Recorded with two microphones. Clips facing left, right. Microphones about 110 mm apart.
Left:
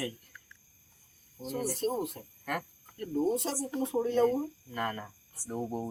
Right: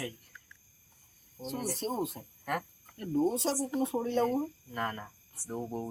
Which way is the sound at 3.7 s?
15° right (ahead or behind).